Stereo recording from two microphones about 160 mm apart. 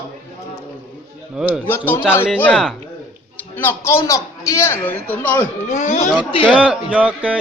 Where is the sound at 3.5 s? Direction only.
15° left (ahead or behind).